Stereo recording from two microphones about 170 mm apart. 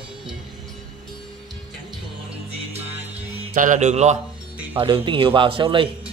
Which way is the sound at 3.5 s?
50° right (ahead or behind).